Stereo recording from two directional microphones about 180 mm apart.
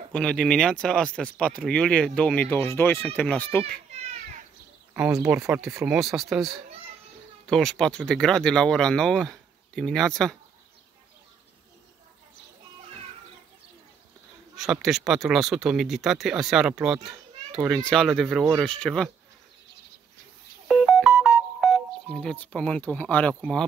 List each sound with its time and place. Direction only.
0.1 s speech: 5° left (ahead or behind)
4.9 s speech: 10° right (ahead or behind)
14.6 s speech: centre (ahead or behind)
20.6 s music: centre (ahead or behind)